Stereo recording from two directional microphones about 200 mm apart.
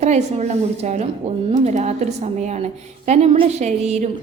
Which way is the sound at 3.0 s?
35° right (ahead or behind).